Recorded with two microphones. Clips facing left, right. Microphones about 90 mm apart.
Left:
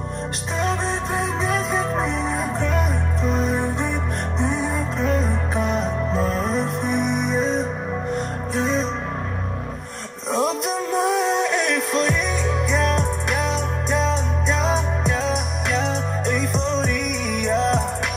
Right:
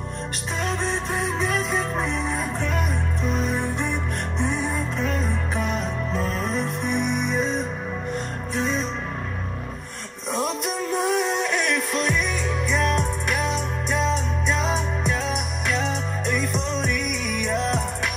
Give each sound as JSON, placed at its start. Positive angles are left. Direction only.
{"t": 0.6, "sound": "music", "side_deg": 30}
{"t": 10.3, "sound": "music", "side_deg": 30}